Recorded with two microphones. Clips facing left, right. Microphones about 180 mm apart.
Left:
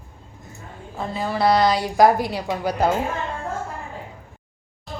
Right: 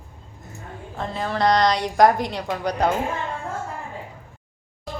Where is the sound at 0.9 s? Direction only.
5° left (ahead or behind).